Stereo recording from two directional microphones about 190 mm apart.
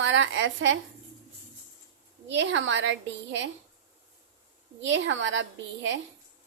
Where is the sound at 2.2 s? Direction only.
70° right (ahead or behind).